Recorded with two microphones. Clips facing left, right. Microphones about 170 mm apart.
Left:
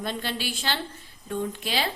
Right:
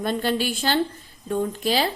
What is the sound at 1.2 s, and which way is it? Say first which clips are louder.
Speech: right 6 dB; 40° right (ahead or behind).